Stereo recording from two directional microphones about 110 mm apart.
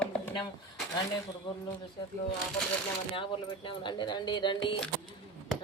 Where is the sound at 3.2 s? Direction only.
50° left (ahead or behind).